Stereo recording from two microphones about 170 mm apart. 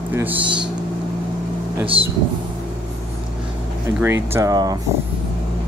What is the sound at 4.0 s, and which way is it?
Speech, 15° right (ahead or behind).